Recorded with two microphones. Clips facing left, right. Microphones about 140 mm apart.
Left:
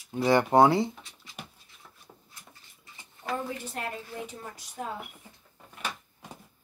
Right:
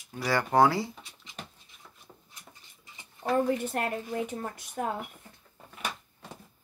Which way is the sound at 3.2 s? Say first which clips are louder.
Right 5 dB; 50° right (ahead or behind).